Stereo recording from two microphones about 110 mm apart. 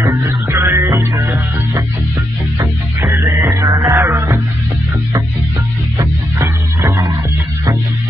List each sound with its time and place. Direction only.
0.0 s music: 30° right (ahead or behind)
5.9 s music: 25° right (ahead or behind)